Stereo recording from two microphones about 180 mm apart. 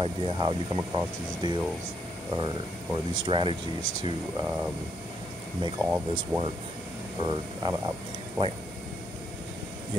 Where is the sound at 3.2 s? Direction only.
25° right (ahead or behind).